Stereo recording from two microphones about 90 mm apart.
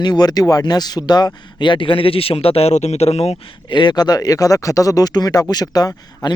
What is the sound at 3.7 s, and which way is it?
Speech, 55° left (ahead or behind).